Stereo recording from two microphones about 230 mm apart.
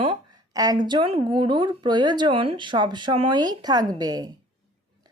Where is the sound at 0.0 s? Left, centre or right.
Centre.